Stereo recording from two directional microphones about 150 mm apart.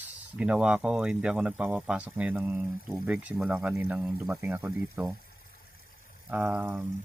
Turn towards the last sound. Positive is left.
turn(degrees=-10)  # may be behind; listen again after turning